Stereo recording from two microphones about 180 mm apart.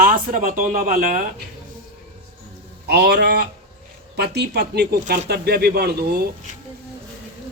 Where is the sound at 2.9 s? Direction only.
65° right (ahead or behind).